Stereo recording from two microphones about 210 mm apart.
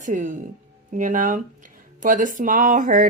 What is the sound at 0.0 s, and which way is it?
A woman's voice, 35° right (ahead or behind).